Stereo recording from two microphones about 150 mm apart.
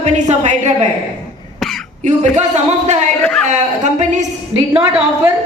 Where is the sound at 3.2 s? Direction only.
5° left (ahead or behind).